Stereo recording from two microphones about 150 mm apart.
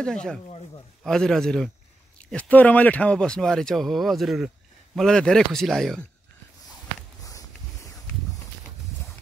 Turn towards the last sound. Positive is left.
turn(degrees=20)  # may be behind; listen again after turning